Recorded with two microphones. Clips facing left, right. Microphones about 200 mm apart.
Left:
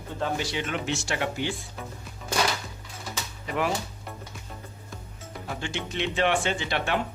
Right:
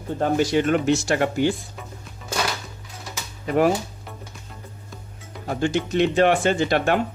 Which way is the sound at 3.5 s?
45° right (ahead or behind).